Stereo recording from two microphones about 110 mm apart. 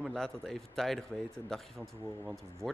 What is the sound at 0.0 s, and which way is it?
A man's voice, 5° left (ahead or behind).